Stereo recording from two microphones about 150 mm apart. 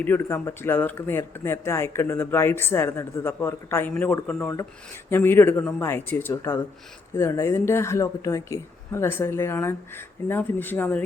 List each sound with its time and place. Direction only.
0.0 s speech: 10° left (ahead or behind)